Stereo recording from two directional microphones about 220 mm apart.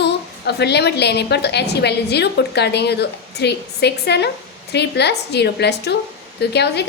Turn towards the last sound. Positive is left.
turn(degrees=50)  # may be behind; listen again after turning